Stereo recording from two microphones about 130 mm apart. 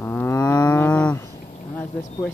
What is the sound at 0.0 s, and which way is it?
Livestock, 15° left (ahead or behind).